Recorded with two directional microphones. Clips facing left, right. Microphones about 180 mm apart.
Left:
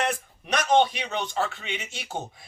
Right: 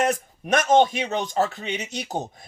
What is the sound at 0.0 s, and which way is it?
A man's voice, 45° right (ahead or behind).